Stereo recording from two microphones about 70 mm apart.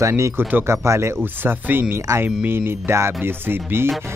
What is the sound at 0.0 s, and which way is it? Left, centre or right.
Speech, right.